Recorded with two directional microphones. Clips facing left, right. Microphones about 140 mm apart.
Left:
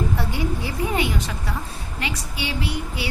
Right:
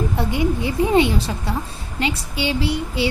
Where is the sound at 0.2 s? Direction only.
20° right (ahead or behind).